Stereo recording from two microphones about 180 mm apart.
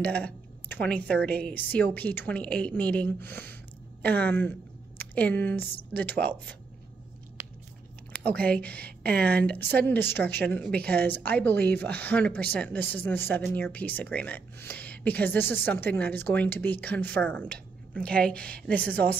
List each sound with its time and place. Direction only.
0.0 s a woman's voice: 10° left (ahead or behind)
8.1 s speech: 10° left (ahead or behind)